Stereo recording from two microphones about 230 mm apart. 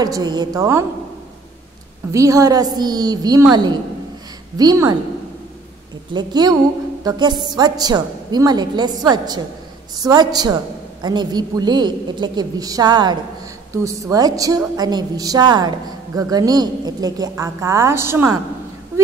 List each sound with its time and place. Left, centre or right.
0.0 s a woman's voice: centre
2.1 s a woman's voice: centre
4.6 s a woman's voice: centre
6.1 s a woman's voice: centre